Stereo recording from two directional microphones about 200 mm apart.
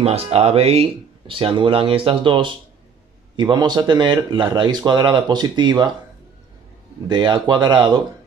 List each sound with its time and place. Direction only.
0.0 s speech: 30° right (ahead or behind)
7.1 s speech: 20° right (ahead or behind)